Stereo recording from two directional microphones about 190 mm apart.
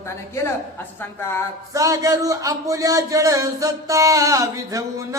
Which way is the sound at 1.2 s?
15° left (ahead or behind).